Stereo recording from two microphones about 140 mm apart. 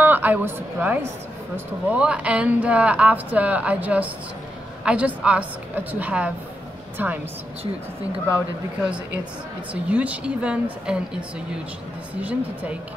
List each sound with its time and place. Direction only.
0.0 s a woman's voice: 15° right (ahead or behind)
9.8 s speech: 10° right (ahead or behind)